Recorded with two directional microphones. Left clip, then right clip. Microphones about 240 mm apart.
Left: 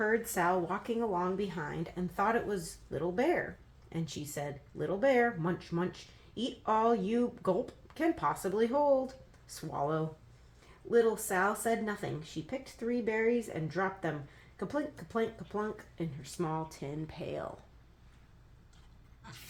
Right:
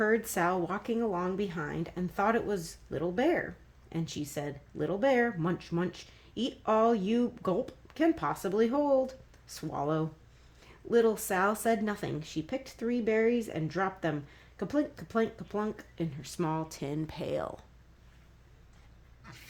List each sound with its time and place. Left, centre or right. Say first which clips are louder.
0.0 s speech: right 2 dB; right